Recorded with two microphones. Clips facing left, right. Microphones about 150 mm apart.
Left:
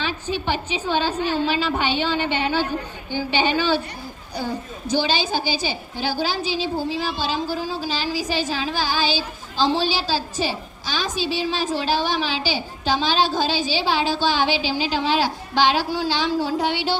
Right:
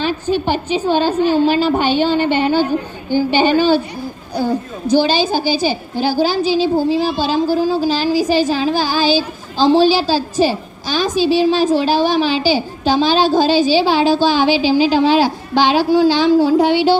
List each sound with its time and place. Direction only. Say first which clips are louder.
0.0 s speech: right 8 dB; 45° right (ahead or behind)
4.9 s a woman's voice: right 7 dB; 40° right (ahead or behind)